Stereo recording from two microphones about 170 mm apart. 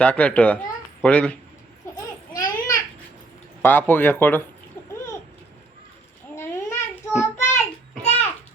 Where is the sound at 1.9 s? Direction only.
20° left (ahead or behind).